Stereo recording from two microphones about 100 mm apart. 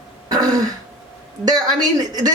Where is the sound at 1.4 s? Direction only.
40° right (ahead or behind).